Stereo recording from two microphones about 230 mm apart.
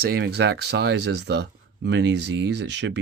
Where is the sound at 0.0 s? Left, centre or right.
Right.